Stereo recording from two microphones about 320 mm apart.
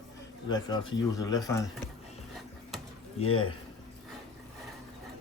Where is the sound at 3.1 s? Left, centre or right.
Centre.